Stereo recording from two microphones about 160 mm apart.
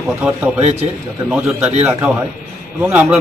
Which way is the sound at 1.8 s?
15° right (ahead or behind).